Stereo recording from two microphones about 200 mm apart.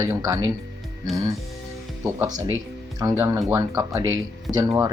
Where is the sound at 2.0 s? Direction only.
15° right (ahead or behind).